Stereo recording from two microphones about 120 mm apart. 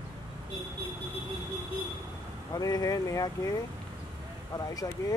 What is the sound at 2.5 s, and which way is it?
Speech, 30° left (ahead or behind).